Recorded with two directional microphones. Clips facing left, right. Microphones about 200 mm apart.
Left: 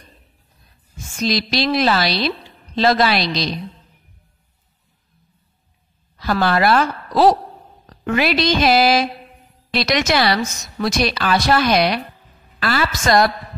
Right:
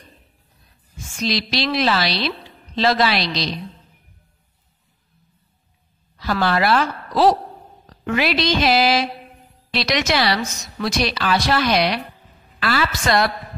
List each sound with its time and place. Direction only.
1.1 s a woman's voice: 45° left (ahead or behind)
6.1 s a woman's voice: 50° left (ahead or behind)